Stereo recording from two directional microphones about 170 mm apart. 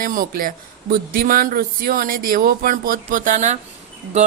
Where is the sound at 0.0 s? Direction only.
55° right (ahead or behind).